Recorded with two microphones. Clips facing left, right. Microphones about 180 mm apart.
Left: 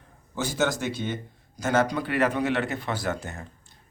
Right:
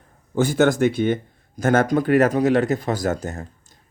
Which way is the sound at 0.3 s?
55° right (ahead or behind).